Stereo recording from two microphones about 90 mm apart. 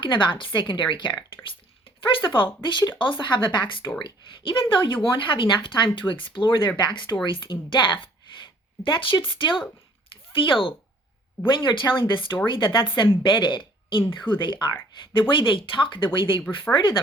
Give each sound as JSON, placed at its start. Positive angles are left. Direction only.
{"t": 0.0, "sound": "a woman's voice", "side_deg": 65}
{"t": 1.5, "sound": "a sound", "side_deg": 75}
{"t": 2.6, "sound": "a woman's voice", "side_deg": 60}
{"t": 11.4, "sound": "a woman's voice", "side_deg": 65}
{"t": 15.3, "sound": "speech", "side_deg": 75}
{"t": 16.7, "sound": "speech", "side_deg": 15}